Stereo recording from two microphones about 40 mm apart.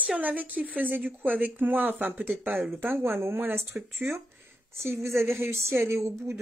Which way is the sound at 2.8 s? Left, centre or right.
Right.